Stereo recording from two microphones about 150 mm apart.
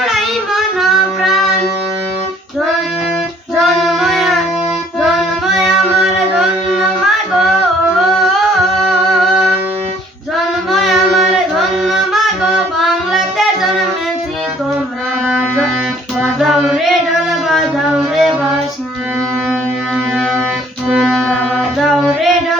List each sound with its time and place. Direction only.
0.0 s child singing: centre (ahead or behind)
3.6 s child singing: centre (ahead or behind)
6.1 s music: centre (ahead or behind)
8.8 s music: centre (ahead or behind)
10.3 s singing: centre (ahead or behind)
16.2 s music: centre (ahead or behind)
17.5 s a sound: centre (ahead or behind)
20.9 s music: centre (ahead or behind)